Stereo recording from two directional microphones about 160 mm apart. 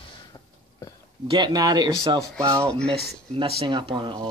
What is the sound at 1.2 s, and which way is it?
Speech, 30° right (ahead or behind).